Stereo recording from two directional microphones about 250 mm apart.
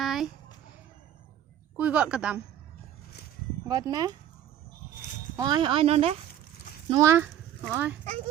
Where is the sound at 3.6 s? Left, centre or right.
Centre.